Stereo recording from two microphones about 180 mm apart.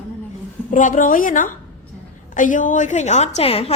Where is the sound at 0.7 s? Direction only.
45° left (ahead or behind).